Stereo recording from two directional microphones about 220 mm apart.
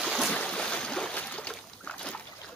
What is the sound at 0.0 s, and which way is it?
Boat, centre (ahead or behind).